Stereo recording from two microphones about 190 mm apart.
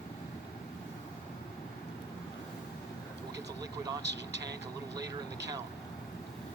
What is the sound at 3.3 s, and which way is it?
Vehicle, 20° right (ahead or behind).